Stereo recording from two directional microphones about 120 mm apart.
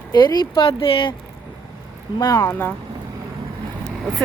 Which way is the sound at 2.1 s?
40° left (ahead or behind).